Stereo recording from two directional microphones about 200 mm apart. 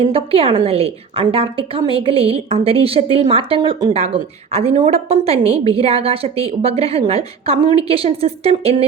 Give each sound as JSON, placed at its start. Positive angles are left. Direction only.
{"t": 0.0, "sound": "a woman's voice", "side_deg": -30}